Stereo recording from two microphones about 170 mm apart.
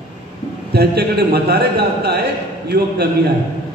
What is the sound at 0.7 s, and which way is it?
A man's voice, 70° right (ahead or behind).